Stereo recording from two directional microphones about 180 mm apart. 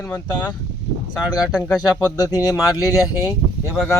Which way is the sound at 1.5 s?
5° left (ahead or behind).